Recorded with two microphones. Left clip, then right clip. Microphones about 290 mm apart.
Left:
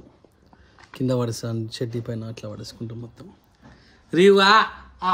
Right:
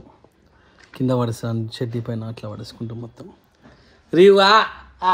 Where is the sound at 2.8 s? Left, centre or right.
Right.